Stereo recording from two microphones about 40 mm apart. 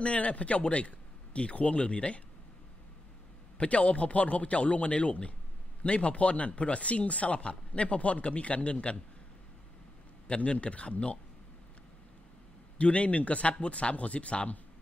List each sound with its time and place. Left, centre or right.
0.0 s speech: left
3.5 s speech: left
10.2 s speech: left
12.7 s speech: left